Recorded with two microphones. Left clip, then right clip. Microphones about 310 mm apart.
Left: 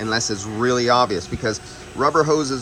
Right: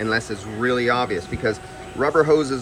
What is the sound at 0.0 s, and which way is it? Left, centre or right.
Speech, centre.